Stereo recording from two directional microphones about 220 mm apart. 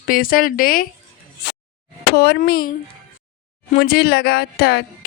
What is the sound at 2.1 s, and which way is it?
Speech, 45° left (ahead or behind).